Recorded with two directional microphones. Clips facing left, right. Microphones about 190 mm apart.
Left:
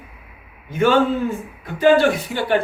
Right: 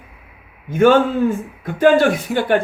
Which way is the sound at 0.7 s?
50° right (ahead or behind).